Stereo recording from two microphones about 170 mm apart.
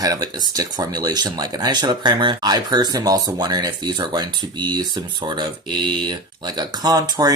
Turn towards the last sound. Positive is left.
turn(degrees=-20)  # may be behind; listen again after turning